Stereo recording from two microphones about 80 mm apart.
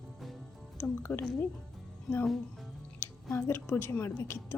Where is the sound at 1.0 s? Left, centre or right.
Left.